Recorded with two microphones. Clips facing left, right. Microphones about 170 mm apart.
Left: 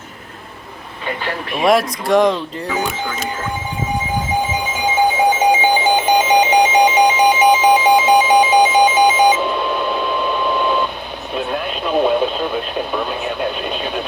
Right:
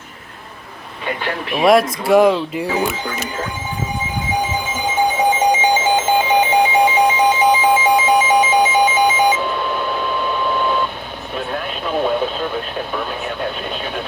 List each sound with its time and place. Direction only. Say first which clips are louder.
1.5 s speech: right 2 dB; centre (ahead or behind)
5.4 s alarm clock: left 1 dB; 10° left (ahead or behind)
11.3 s radio: left 3 dB; 20° left (ahead or behind)